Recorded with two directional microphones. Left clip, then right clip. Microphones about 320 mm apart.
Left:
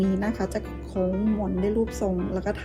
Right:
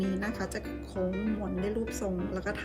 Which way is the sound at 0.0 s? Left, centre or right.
Centre.